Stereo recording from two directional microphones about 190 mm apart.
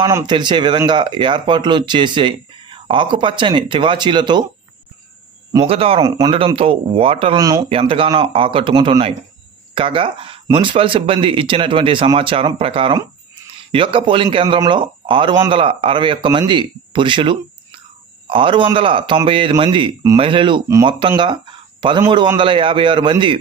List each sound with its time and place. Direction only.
0.0 s speech: 20° right (ahead or behind)
5.7 s speech: 30° right (ahead or behind)